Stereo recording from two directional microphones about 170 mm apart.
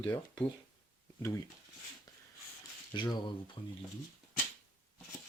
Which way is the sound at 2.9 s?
25° left (ahead or behind).